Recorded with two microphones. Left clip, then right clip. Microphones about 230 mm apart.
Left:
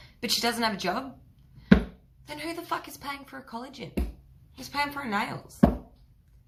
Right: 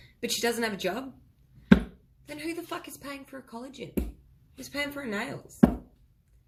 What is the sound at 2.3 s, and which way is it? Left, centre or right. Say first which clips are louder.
A woman's voice: left 3 dB; centre.